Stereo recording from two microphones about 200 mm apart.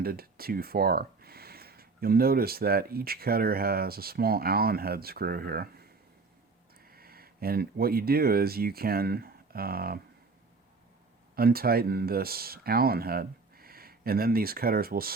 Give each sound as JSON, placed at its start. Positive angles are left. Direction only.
{"t": 0.0, "sound": "speech", "side_deg": -50}
{"t": 11.3, "sound": "speech", "side_deg": -50}